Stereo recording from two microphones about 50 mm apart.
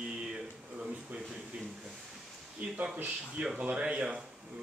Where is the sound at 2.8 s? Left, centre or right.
Right.